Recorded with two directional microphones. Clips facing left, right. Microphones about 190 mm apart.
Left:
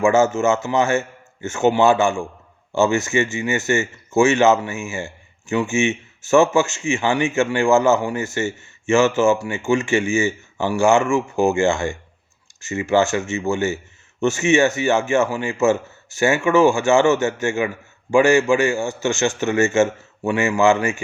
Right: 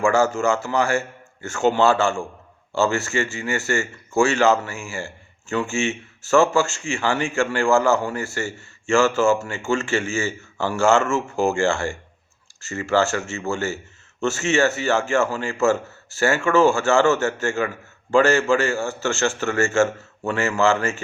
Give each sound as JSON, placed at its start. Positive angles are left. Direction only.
{"t": 0.0, "sound": "a man's voice", "side_deg": 20}